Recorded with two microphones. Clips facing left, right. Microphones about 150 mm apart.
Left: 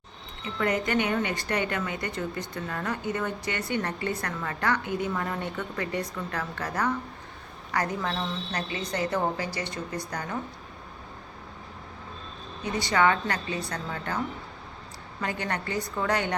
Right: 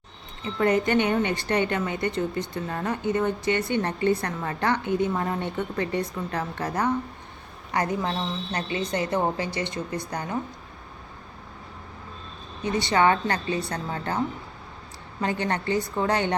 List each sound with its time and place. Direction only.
0.6 s a woman's voice: 30° right (ahead or behind)
12.8 s a woman's voice: 30° right (ahead or behind)
15.2 s a woman's voice: 25° right (ahead or behind)